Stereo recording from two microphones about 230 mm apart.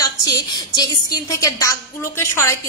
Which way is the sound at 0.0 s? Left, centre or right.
Centre.